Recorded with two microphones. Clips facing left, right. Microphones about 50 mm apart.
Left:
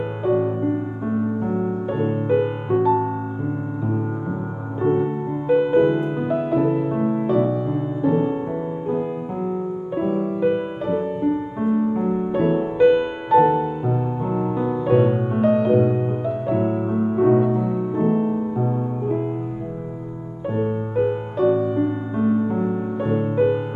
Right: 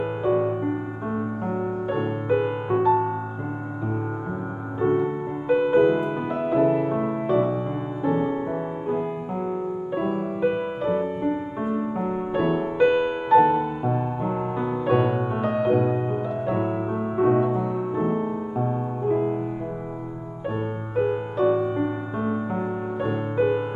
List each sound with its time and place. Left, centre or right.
0.2 s music: centre
2.0 s music: centre
4.7 s music: centre
9.9 s music: right
10.4 s music: centre
12.0 s music: right
12.3 s music: centre
15.0 s music: centre
20.5 s music: centre